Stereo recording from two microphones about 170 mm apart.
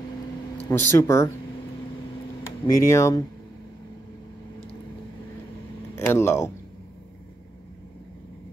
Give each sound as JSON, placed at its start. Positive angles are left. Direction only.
{"t": 0.7, "sound": "speech", "side_deg": 20}
{"t": 2.6, "sound": "speech", "side_deg": 15}
{"t": 5.9, "sound": "speech", "side_deg": 15}